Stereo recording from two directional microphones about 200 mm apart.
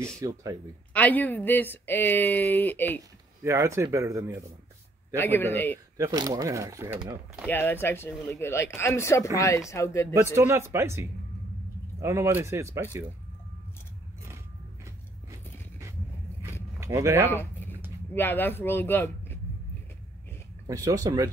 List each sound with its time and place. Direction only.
0.2 s speech: 15° right (ahead or behind)
0.9 s speech: 10° left (ahead or behind)
3.4 s speech: 15° right (ahead or behind)
5.1 s speech: 10° left (ahead or behind)
5.9 s speech: 15° right (ahead or behind)
7.4 s speech: 10° left (ahead or behind)
10.1 s speech: 15° right (ahead or behind)
16.8 s speech: 15° right (ahead or behind)
17.3 s a sound: 10° left (ahead or behind)
18.1 s speech: 10° left (ahead or behind)
20.6 s speech: 15° right (ahead or behind)